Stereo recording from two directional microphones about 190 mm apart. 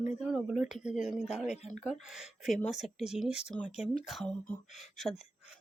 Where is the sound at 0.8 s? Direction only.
40° left (ahead or behind).